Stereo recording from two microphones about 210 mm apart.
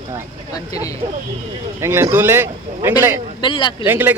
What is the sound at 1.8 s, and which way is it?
A man's voice, 10° right (ahead or behind).